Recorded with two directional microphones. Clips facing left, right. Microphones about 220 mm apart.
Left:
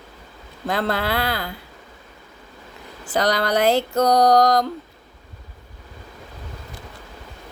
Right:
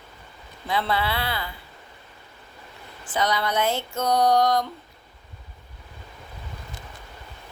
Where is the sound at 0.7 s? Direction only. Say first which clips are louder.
Left 3 dB; 45° left (ahead or behind).